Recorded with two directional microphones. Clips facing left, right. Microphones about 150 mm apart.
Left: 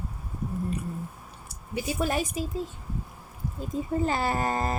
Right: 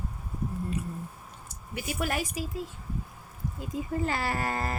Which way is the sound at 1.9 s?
25° left (ahead or behind).